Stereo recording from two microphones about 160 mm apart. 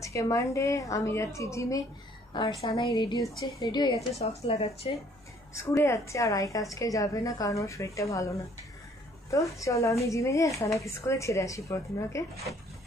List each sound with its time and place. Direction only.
0.0 s a woman's voice: 20° left (ahead or behind)
2.3 s a woman's voice: 30° left (ahead or behind)
4.2 s a woman's voice: 40° left (ahead or behind)
5.6 s a woman's voice: 20° left (ahead or behind)